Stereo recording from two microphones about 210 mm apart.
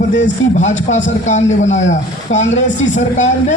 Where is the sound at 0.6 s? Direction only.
35° left (ahead or behind).